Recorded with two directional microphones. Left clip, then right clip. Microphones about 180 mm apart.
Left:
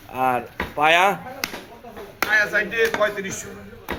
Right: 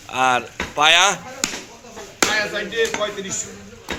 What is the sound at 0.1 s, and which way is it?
Speech, 5° left (ahead or behind).